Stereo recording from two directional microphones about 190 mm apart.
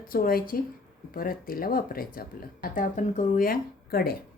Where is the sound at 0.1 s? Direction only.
50° left (ahead or behind).